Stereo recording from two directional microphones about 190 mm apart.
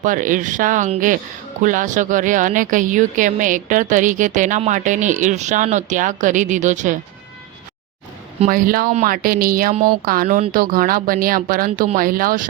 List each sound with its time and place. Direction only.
0.0 s speech: 45° right (ahead or behind)
8.4 s speech: 50° right (ahead or behind)